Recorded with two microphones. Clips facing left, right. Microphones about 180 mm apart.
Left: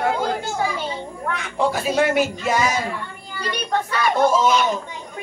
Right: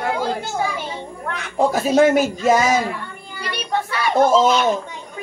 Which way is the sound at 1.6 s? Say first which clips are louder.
Right 5 dB; 40° right (ahead or behind).